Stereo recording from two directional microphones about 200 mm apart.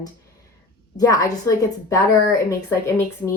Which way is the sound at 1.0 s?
15° left (ahead or behind).